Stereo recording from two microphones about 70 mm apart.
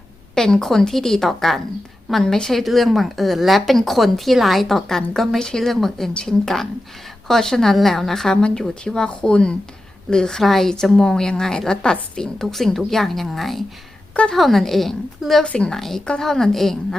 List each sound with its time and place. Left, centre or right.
0.3 s a woman's voice: centre
14.1 s a woman's voice: centre
14.3 s a woman's voice: centre
15.5 s a woman's voice: centre